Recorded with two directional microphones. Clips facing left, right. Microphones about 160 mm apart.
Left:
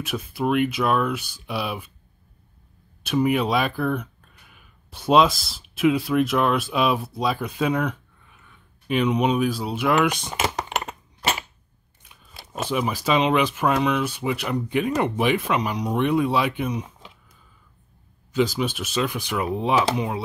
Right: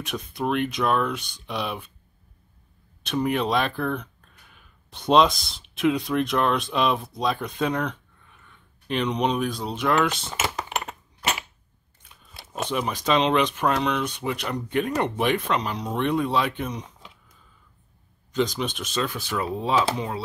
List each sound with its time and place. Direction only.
0.0 s speech: 5° left (ahead or behind)
3.0 s speech: 5° left (ahead or behind)
12.0 s speech: 5° left (ahead or behind)
18.3 s speech: 5° left (ahead or behind)